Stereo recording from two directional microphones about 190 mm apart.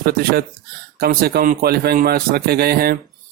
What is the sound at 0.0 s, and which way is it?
A man's voice, 55° right (ahead or behind).